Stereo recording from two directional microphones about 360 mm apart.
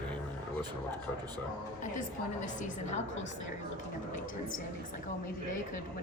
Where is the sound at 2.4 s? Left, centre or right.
Centre.